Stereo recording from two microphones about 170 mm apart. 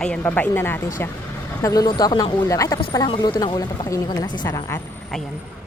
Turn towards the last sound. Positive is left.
turn(degrees=20)  # may be behind; listen again after turning